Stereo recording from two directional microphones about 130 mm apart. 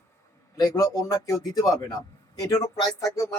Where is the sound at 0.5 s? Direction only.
30° left (ahead or behind).